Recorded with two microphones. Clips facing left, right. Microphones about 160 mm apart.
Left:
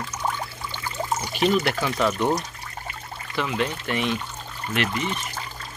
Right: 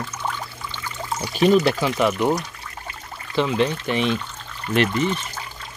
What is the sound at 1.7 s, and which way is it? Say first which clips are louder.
Speech: right 3 dB; 20° right (ahead or behind).